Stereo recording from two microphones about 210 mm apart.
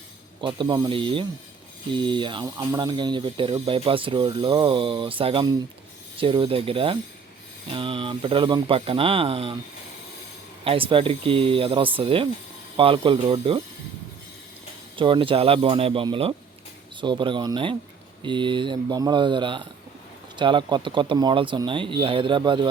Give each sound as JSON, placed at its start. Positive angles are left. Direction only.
{"t": 0.4, "sound": "speech", "side_deg": -20}
{"t": 10.6, "sound": "speech", "side_deg": -25}
{"t": 14.9, "sound": "speech", "side_deg": -25}